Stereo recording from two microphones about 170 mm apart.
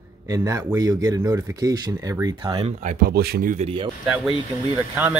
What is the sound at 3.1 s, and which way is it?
Speech, 65° right (ahead or behind).